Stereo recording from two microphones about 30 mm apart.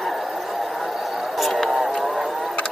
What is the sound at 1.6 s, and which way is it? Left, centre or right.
Vehicle, centre.